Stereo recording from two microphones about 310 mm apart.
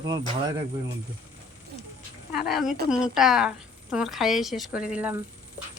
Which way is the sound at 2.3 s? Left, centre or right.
Centre.